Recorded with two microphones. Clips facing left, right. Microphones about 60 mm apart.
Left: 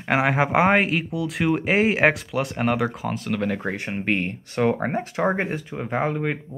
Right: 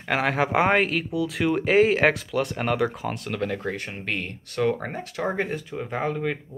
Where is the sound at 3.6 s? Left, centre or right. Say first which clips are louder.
Left 4 dB; left.